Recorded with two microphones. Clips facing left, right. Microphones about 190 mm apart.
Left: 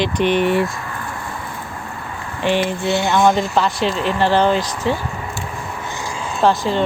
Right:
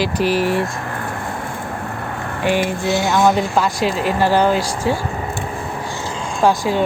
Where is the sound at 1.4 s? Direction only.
60° right (ahead or behind).